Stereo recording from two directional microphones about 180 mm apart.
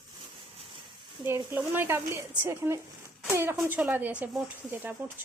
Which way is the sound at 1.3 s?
15° right (ahead or behind).